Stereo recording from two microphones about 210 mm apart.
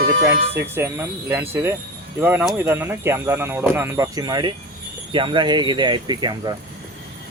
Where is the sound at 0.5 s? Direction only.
10° right (ahead or behind).